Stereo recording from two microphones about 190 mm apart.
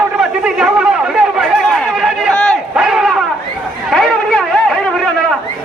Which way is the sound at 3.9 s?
Centre (ahead or behind).